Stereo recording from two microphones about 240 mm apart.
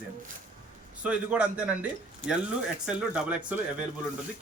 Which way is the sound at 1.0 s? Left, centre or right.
Centre.